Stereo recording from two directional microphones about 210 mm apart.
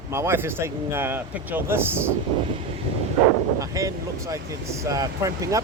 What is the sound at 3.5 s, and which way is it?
Speech, 15° right (ahead or behind).